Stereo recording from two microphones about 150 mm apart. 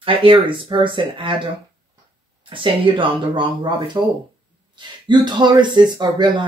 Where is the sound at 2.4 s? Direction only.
35° right (ahead or behind).